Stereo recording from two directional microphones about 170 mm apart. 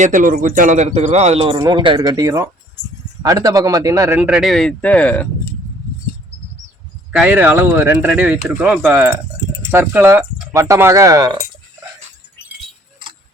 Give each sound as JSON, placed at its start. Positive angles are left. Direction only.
{"t": 0.0, "sound": "a man's voice", "side_deg": -50}
{"t": 1.5, "sound": "speech", "side_deg": -25}
{"t": 4.2, "sound": "speech", "side_deg": -5}
{"t": 7.1, "sound": "speech", "side_deg": -5}